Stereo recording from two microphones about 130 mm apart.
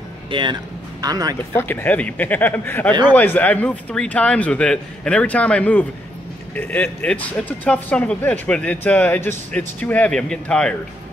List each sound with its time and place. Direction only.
0.3 s speech: 35° right (ahead or behind)
1.5 s speech: 15° left (ahead or behind)